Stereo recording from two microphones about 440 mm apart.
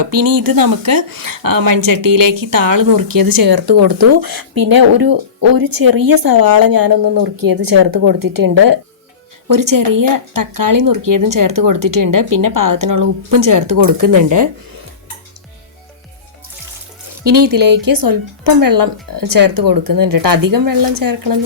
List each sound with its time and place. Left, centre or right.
0.0 s a woman's voice: right
17.2 s a woman's voice: right